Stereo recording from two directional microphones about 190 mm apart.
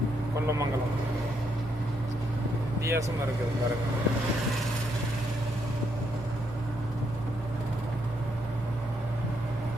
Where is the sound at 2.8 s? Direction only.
15° right (ahead or behind).